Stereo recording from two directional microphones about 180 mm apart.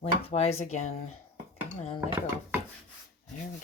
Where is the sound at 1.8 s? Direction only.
35° left (ahead or behind).